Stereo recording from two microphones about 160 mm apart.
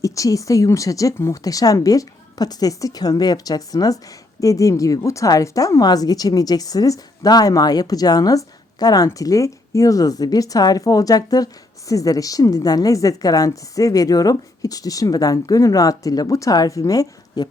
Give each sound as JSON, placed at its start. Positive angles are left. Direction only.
{"t": 0.0, "sound": "a woman's voice", "side_deg": 20}